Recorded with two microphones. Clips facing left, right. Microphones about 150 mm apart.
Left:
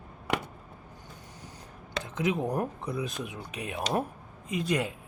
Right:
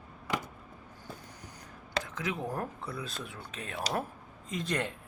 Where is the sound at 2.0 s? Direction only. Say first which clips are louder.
Left 7 dB; 20° left (ahead or behind).